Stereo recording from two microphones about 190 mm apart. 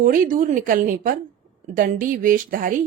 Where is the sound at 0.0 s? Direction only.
45° right (ahead or behind).